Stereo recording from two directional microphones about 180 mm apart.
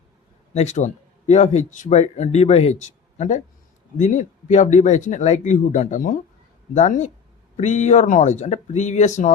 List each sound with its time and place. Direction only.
0.5 s speech: 40° left (ahead or behind)